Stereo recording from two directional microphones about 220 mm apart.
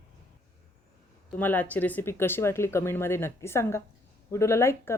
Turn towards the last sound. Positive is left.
turn(degrees=10)  # may be behind; listen again after turning